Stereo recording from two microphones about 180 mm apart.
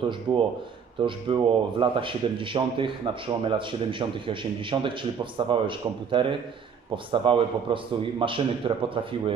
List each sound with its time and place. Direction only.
0.0 s a man's voice: 30° right (ahead or behind)